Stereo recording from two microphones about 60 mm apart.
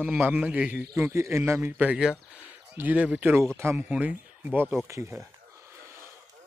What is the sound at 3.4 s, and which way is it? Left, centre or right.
Speech, right.